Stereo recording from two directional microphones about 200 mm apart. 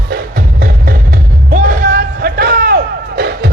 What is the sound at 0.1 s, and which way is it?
Music, 45° right (ahead or behind).